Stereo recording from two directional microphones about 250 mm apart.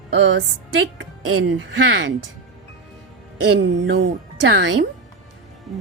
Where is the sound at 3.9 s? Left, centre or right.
Right.